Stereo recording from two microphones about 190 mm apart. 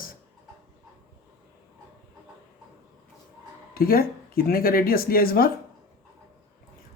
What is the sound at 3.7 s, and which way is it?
Speech, 50° left (ahead or behind).